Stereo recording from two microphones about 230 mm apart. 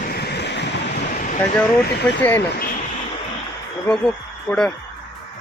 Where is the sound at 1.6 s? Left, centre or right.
Centre.